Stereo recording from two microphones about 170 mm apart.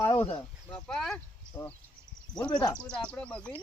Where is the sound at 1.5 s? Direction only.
25° left (ahead or behind).